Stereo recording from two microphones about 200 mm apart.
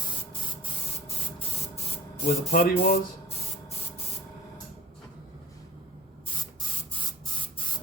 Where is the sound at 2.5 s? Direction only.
50° left (ahead or behind).